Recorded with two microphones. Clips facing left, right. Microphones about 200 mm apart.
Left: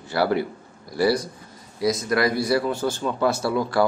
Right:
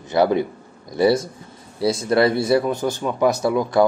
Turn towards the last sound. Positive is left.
turn(degrees=-20)  # may be behind; listen again after turning